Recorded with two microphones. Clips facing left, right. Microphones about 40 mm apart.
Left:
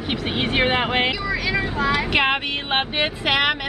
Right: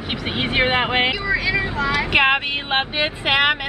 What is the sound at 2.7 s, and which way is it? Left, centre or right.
Speech, centre.